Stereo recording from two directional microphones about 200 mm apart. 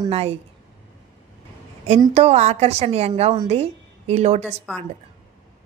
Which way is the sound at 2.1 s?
35° right (ahead or behind).